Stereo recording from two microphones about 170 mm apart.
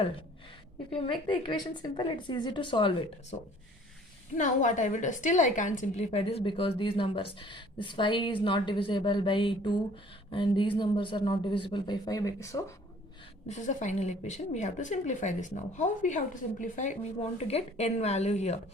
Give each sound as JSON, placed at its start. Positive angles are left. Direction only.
{"t": 0.9, "sound": "speech", "side_deg": 30}
{"t": 4.4, "sound": "a woman's voice", "side_deg": 45}
{"t": 13.5, "sound": "a woman's voice", "side_deg": 45}